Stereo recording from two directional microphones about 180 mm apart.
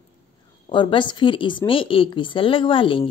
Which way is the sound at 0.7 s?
25° left (ahead or behind).